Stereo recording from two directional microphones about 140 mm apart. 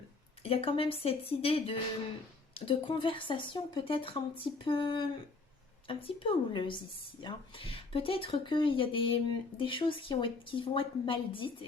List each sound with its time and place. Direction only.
0.4 s speech: 40° left (ahead or behind)